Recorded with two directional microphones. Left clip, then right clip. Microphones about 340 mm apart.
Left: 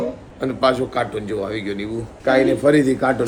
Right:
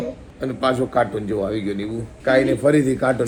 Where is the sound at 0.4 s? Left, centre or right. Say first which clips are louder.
Left 3 dB; centre.